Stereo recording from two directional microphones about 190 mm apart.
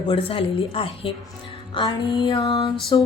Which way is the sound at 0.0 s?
30° left (ahead or behind).